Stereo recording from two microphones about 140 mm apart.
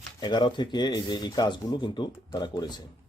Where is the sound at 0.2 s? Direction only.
30° left (ahead or behind).